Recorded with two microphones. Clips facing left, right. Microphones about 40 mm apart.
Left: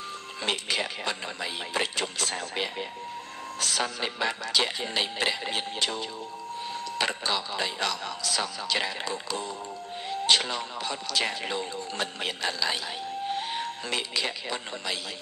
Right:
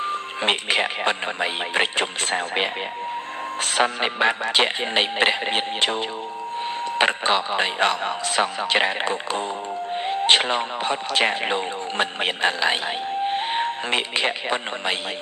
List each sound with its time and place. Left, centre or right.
0.0 s speech: right